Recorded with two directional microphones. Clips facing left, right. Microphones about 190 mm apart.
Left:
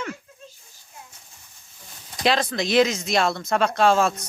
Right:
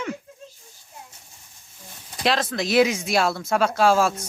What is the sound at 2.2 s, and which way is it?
Speech, centre (ahead or behind).